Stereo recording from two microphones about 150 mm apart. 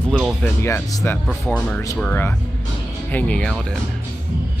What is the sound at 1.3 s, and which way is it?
Speech, 5° left (ahead or behind).